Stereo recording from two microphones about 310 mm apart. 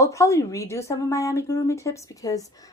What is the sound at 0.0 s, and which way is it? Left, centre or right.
A woman's voice, centre.